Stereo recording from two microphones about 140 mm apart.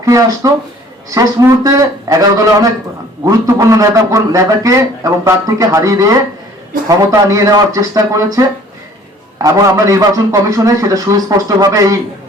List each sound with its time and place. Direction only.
0.0 s a man's voice: 20° right (ahead or behind)